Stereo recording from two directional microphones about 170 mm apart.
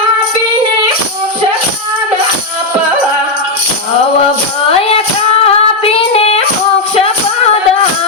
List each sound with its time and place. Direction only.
5.5 s female singing: 35° left (ahead or behind)
6.9 s music: 35° left (ahead or behind)